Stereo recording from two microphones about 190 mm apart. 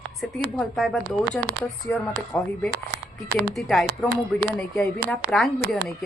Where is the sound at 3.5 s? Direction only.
Centre (ahead or behind).